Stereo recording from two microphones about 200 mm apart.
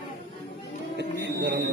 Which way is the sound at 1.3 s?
60° right (ahead or behind).